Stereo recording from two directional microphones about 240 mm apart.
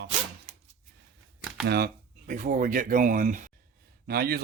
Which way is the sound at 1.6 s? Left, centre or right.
Right.